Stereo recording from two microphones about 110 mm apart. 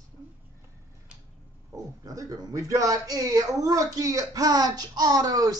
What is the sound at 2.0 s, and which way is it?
A man's voice, 30° right (ahead or behind).